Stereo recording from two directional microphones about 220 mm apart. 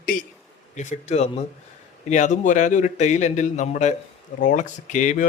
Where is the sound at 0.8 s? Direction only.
30° left (ahead or behind).